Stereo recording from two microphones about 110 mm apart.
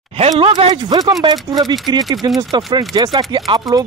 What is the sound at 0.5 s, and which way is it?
Speech, 90° right.